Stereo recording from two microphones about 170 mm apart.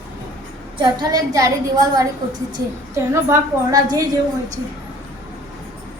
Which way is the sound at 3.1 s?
20° right (ahead or behind).